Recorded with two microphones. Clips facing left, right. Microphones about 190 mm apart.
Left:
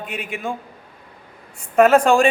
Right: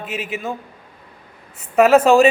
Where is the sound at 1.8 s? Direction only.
5° right (ahead or behind).